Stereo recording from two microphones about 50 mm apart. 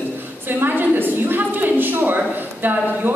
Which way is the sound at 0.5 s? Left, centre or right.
Right.